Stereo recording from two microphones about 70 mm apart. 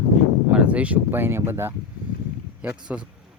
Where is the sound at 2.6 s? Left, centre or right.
Centre.